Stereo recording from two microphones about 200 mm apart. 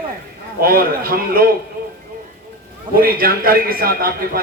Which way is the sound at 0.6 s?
50° right (ahead or behind).